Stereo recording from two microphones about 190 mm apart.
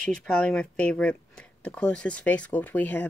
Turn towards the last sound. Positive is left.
turn(degrees=10)  # may be behind; listen again after turning